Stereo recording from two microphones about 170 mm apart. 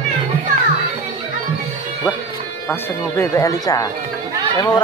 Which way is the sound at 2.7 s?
15° left (ahead or behind).